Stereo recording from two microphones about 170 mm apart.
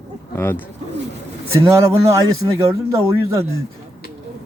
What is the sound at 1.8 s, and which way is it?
Speech, 20° right (ahead or behind).